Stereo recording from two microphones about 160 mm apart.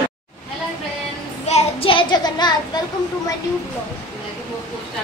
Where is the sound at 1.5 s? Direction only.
35° left (ahead or behind).